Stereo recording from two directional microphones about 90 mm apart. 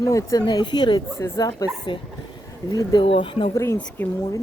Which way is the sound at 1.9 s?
70° left (ahead or behind).